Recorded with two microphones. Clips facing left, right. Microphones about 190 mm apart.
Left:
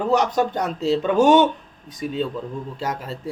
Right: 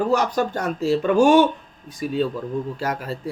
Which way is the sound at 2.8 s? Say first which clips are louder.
Right 1 dB; 25° left (ahead or behind).